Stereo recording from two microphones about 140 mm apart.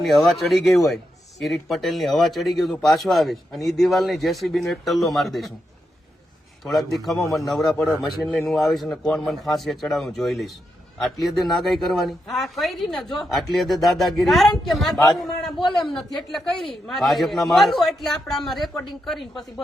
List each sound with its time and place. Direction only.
0.0 s speech: centre (ahead or behind)
6.9 s speech: centre (ahead or behind)